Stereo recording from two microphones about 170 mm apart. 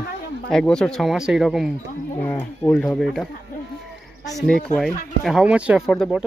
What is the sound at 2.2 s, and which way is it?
Speech, 10° left (ahead or behind).